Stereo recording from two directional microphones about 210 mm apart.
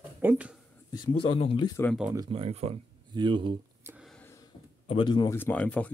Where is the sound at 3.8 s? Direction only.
10° right (ahead or behind).